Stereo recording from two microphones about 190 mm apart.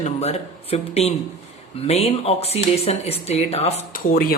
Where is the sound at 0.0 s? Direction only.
35° left (ahead or behind).